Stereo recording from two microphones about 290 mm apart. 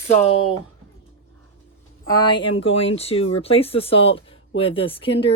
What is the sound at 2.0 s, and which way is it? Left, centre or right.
Speech, centre.